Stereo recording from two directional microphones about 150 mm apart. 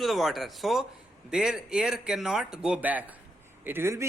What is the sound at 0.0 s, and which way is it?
A man's voice, centre (ahead or behind).